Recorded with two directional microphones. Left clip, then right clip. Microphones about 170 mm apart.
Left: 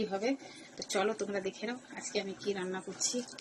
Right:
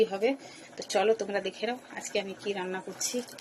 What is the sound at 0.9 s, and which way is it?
Speech, 45° right (ahead or behind).